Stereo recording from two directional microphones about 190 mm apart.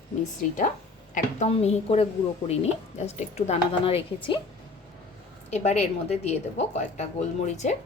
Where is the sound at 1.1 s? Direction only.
35° left (ahead or behind).